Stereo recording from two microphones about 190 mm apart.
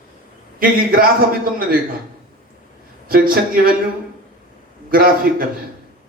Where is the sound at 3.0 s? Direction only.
50° right (ahead or behind).